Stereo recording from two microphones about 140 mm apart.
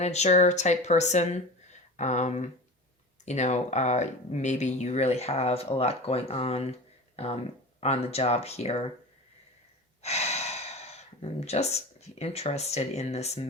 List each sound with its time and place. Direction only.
0.0 s speech: 50° left (ahead or behind)
10.0 s speech: 50° left (ahead or behind)